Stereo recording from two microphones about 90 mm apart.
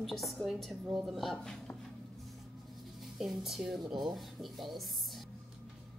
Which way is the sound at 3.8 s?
55° right (ahead or behind).